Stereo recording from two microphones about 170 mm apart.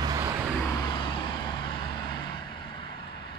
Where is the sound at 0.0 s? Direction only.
20° right (ahead or behind).